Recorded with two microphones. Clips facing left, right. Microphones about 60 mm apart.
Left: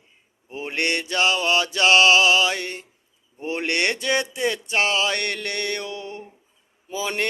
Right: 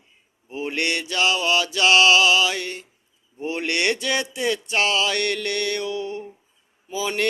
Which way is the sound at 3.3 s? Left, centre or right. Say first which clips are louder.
Even; left.